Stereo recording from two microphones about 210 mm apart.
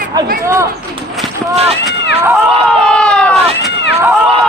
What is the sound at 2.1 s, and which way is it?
Run, 30° right (ahead or behind).